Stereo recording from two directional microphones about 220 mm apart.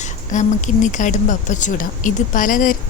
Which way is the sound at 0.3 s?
35° left (ahead or behind).